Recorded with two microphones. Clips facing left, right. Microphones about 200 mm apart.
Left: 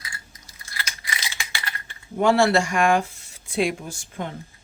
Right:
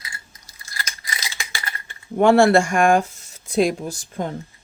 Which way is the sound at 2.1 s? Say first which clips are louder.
Right 5 dB; 55° right (ahead or behind).